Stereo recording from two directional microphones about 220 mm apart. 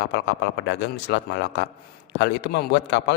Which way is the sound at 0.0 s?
50° left (ahead or behind).